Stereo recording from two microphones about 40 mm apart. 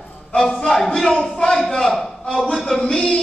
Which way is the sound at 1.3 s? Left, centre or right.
Left.